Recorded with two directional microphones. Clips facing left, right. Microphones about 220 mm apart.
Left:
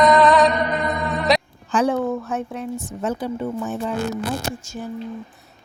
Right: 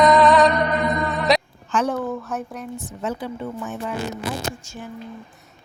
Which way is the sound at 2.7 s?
45° left (ahead or behind).